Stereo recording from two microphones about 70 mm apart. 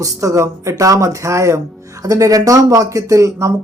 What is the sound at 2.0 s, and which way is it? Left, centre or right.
Speech, right.